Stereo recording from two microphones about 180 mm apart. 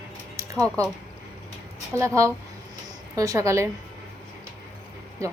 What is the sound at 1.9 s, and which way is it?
A woman's voice, 15° right (ahead or behind).